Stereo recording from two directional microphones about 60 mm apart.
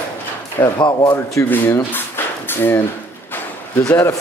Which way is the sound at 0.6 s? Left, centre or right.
Left.